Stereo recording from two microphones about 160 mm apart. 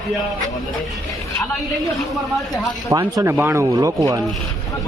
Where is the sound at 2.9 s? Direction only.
20° right (ahead or behind).